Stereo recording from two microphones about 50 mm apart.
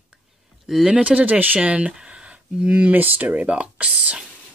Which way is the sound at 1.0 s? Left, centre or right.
Right.